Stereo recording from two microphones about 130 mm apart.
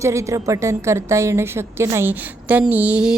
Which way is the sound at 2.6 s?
10° right (ahead or behind).